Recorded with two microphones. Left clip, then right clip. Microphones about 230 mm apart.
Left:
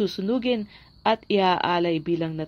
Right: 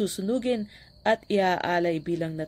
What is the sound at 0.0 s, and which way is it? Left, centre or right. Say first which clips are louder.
Speech: left 2 dB; centre.